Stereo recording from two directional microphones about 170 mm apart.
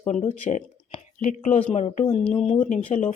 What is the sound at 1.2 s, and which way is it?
Speech, 50° left (ahead or behind).